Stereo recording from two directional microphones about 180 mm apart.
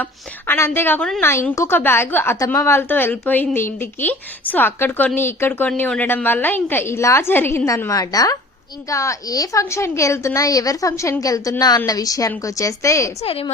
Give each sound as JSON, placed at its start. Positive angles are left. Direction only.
{"t": 0.0, "sound": "a woman's voice", "side_deg": 10}
{"t": 13.2, "sound": "a woman's voice", "side_deg": 30}